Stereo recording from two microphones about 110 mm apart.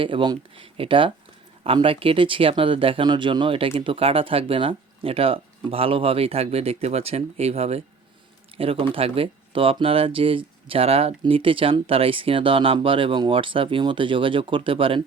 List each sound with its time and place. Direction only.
0.0 s speech: 50° right (ahead or behind); by 7.8 s 70° right (ahead or behind)
8.5 s speech: 60° right (ahead or behind)